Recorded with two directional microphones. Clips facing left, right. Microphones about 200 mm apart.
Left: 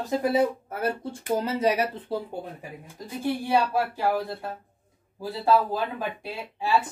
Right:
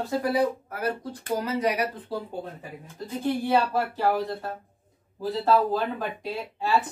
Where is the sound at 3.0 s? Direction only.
15° left (ahead or behind).